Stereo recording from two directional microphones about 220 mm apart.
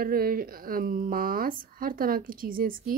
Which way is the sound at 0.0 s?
40° right (ahead or behind).